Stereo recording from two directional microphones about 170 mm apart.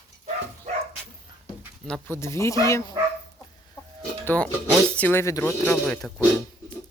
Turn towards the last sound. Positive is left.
turn(degrees=5)  # may be behind; listen again after turning